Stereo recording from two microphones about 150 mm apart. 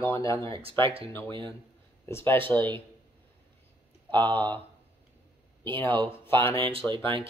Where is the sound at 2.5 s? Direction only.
30° right (ahead or behind).